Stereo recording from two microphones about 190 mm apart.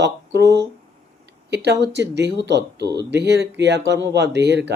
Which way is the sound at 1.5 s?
60° right (ahead or behind).